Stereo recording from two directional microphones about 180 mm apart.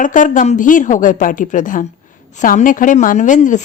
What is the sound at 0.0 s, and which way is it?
A woman's voice, 45° left (ahead or behind).